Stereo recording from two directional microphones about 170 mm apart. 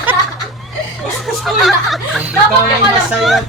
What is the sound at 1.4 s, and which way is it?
Speech, centre (ahead or behind).